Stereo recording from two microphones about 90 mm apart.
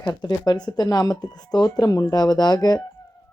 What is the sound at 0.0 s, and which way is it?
Speech, 45° left (ahead or behind).